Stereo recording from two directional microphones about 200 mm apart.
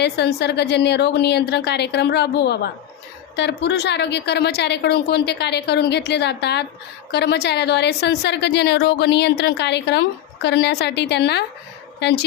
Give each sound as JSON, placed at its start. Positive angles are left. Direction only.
{"t": 0.0, "sound": "a woman's voice", "side_deg": 55}